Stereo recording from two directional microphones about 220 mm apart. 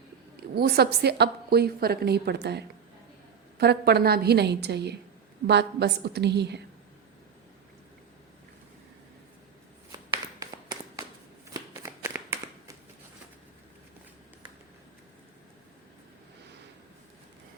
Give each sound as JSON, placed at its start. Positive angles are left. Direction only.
{"t": 0.3, "sound": "a woman's voice", "side_deg": -45}
{"t": 10.4, "sound": "tap", "side_deg": -15}
{"t": 11.5, "sound": "shuffling cards", "side_deg": -15}